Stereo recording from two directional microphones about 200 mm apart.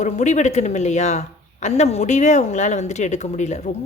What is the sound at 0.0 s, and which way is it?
Speech, 35° left (ahead or behind).